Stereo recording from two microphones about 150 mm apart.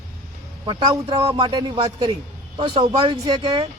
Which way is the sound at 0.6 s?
30° right (ahead or behind).